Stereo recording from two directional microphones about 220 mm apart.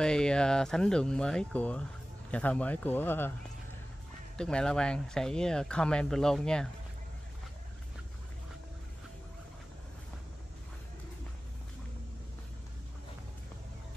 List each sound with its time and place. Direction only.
0.0 s speech: 5° left (ahead or behind)
4.4 s speech: 5° left (ahead or behind)